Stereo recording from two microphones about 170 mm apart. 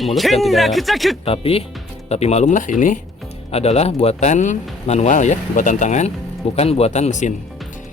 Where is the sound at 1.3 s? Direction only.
35° left (ahead or behind).